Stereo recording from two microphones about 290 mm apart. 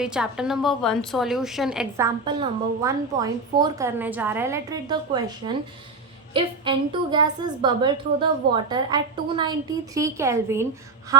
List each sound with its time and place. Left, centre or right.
0.0 s a woman's voice: centre
2.2 s a woman's voice: centre